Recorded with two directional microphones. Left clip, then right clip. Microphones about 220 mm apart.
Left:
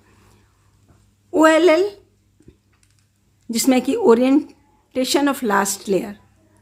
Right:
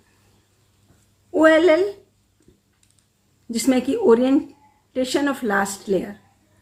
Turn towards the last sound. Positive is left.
turn(degrees=45)  # may be behind; listen again after turning